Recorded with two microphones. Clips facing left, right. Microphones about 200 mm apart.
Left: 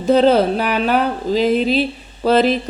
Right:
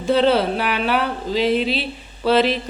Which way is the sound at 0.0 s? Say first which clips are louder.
Left 4 dB; 40° left (ahead or behind).